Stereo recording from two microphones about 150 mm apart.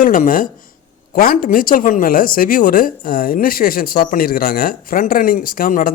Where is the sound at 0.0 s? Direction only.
65° left (ahead or behind).